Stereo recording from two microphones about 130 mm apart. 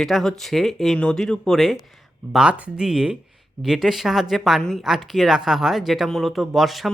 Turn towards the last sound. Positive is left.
turn(degrees=0)  # may be behind; listen again after turning